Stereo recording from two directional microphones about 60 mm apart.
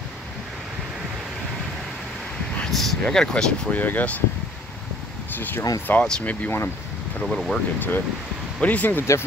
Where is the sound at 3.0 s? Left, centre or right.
Centre.